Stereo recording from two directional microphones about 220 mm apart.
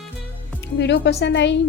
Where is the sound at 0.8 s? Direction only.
50° left (ahead or behind).